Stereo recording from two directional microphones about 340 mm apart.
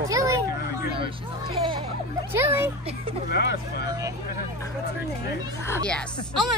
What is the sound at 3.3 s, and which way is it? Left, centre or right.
Speech, left.